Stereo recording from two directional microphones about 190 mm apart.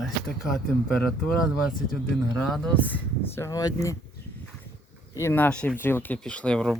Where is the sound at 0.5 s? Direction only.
5° left (ahead or behind).